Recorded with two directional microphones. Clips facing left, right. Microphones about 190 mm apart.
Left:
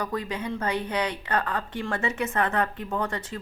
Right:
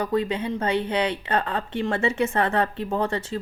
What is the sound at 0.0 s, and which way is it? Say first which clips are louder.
Speech: right 6 dB; 25° right (ahead or behind).